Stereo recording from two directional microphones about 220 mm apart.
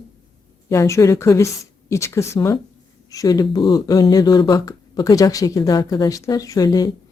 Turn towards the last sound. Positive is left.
turn(degrees=15)  # may be behind; listen again after turning